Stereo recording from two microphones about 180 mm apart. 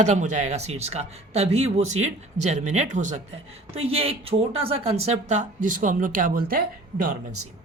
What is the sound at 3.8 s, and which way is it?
Speech, 30° right (ahead or behind).